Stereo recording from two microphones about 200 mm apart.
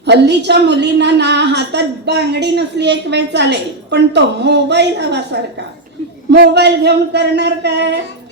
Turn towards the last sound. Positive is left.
turn(degrees=-55)  # may be behind; listen again after turning